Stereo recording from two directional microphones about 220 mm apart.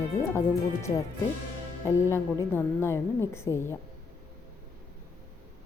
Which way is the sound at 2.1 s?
10° left (ahead or behind).